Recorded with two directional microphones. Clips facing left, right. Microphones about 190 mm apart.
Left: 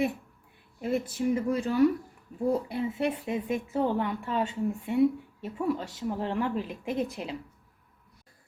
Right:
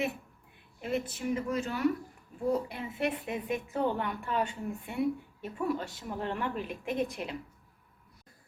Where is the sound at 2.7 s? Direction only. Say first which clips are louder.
Left 4 dB; 30° left (ahead or behind).